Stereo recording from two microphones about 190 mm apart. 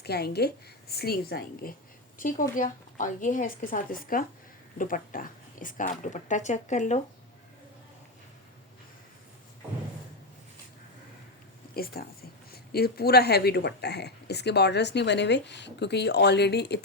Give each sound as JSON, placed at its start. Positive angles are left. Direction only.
{"t": 0.0, "sound": "speech", "side_deg": 60}
{"t": 11.7, "sound": "speech", "side_deg": 50}